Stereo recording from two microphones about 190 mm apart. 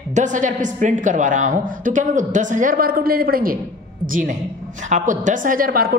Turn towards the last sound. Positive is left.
turn(degrees=-50)  # may be behind; listen again after turning